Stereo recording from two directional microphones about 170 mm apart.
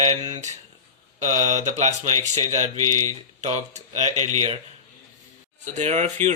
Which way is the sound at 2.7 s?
20° left (ahead or behind).